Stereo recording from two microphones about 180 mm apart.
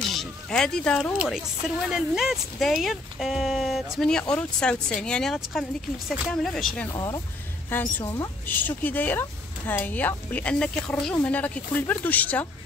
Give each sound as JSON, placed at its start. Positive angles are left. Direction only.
{"t": 0.1, "sound": "a sound", "side_deg": 0}
{"t": 1.9, "sound": "speech", "side_deg": 0}
{"t": 6.9, "sound": "speech", "side_deg": 20}